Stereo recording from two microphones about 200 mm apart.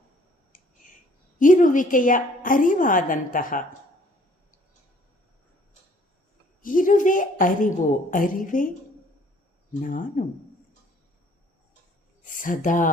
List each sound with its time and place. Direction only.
0.5 s a sound: 40° left (ahead or behind)
1.4 s a woman's voice: 40° left (ahead or behind)
6.6 s a woman's voice: 40° left (ahead or behind)
9.8 s a woman's voice: 40° left (ahead or behind)
12.2 s a woman's voice: 40° left (ahead or behind)